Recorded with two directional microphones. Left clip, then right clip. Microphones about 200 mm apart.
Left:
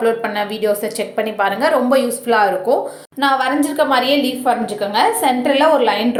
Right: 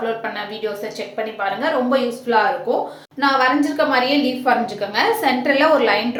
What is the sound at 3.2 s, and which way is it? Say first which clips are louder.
A woman's voice: left 1 dB; 25° left (ahead or behind).